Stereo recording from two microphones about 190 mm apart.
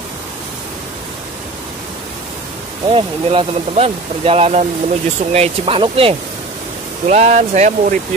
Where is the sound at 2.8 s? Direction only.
30° right (ahead or behind).